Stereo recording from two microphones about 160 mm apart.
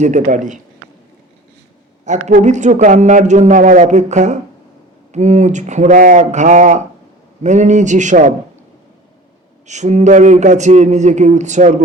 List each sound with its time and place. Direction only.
0.0 s speech: 50° right (ahead or behind)
2.0 s speech: 50° right (ahead or behind)
9.6 s speech: 45° right (ahead or behind)